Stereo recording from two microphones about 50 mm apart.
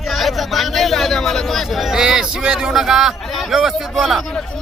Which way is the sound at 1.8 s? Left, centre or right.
Centre.